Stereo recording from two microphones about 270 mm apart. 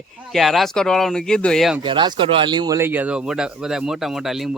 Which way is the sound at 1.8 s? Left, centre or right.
Centre.